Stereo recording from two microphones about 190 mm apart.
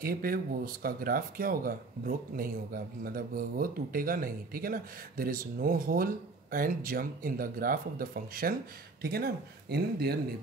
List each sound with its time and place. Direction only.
0.0 s speech: 50° right (ahead or behind)